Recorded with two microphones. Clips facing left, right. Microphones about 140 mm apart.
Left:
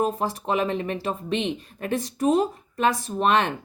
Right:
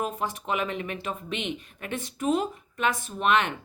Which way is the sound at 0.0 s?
35° left (ahead or behind).